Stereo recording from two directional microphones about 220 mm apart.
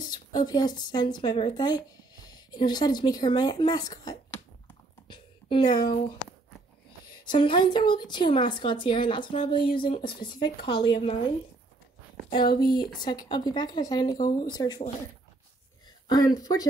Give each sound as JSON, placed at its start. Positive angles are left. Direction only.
{"t": 0.0, "sound": "speech", "side_deg": 20}
{"t": 5.0, "sound": "a sound", "side_deg": 20}
{"t": 7.2, "sound": "speech", "side_deg": 20}
{"t": 12.5, "sound": "speech", "side_deg": 20}
{"t": 16.1, "sound": "speech", "side_deg": 15}